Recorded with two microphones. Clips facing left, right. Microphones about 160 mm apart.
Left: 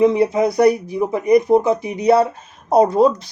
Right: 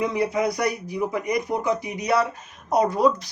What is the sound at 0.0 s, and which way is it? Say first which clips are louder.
Speech: left 8 dB; 25° left (ahead or behind).